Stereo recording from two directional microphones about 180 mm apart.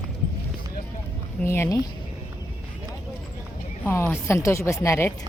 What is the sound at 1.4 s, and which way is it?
Speech, 15° left (ahead or behind).